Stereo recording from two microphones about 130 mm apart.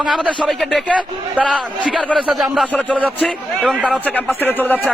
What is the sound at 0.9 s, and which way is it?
A man's voice, 10° right (ahead or behind).